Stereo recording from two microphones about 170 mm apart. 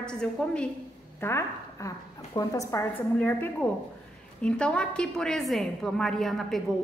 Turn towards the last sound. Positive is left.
turn(degrees=0)  # may be behind; listen again after turning